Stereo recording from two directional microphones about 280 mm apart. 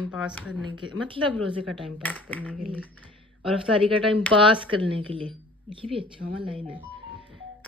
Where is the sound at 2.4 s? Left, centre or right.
Centre.